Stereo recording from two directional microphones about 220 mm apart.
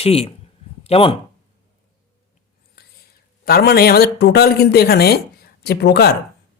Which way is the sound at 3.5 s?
45° left (ahead or behind).